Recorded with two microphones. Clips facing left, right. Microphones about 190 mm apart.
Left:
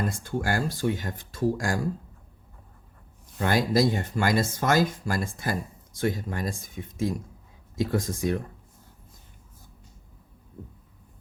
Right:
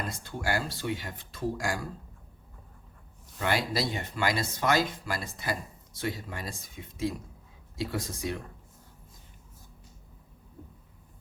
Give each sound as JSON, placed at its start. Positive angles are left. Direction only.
{"t": 0.1, "sound": "speech", "side_deg": 50}
{"t": 3.3, "sound": "speech", "side_deg": 45}